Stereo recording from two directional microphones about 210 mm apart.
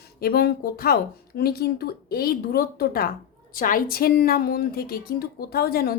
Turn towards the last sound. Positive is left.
turn(degrees=45)  # may be behind; listen again after turning